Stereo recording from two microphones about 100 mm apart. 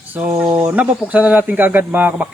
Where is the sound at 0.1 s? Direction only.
15° right (ahead or behind).